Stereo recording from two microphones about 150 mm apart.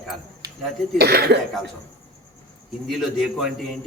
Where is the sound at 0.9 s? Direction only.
90° right.